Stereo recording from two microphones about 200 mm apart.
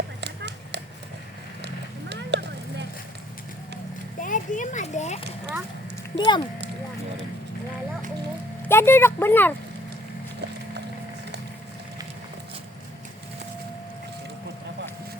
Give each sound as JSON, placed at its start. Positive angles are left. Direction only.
{"t": 0.2, "sound": "a sound", "side_deg": -60}
{"t": 4.2, "sound": "children playing", "side_deg": 40}
{"t": 6.1, "sound": "speech", "side_deg": 20}
{"t": 8.6, "sound": "speech", "side_deg": 10}